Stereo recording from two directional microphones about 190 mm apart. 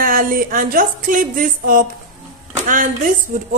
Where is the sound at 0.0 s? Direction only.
45° right (ahead or behind).